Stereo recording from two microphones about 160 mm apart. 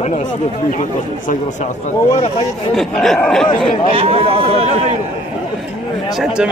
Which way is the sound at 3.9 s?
35° right (ahead or behind).